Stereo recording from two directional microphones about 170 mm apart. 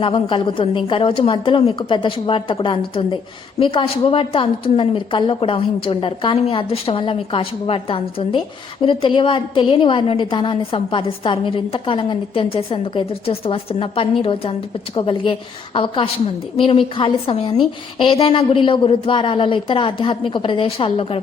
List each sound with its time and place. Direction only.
0.0 s a woman's voice: 30° left (ahead or behind)